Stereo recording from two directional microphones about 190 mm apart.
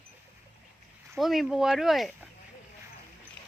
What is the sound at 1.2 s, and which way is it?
Speech, centre (ahead or behind).